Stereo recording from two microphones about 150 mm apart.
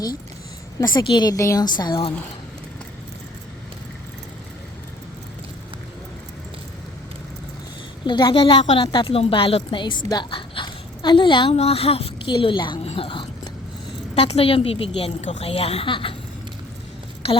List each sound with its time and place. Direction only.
0.8 s a woman's voice: 30° left (ahead or behind)
8.0 s a woman's voice: 30° left (ahead or behind)
12.9 s a sound: 35° left (ahead or behind)
14.2 s a woman's voice: 40° left (ahead or behind)
17.2 s a woman's voice: 40° left (ahead or behind)